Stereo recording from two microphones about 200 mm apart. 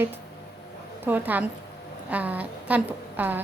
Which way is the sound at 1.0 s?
10° right (ahead or behind).